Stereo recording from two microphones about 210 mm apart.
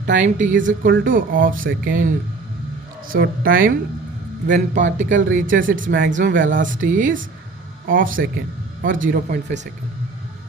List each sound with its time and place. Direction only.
0.0 s a man's voice: 35° right (ahead or behind)
3.1 s a woman's voice: 50° right (ahead or behind)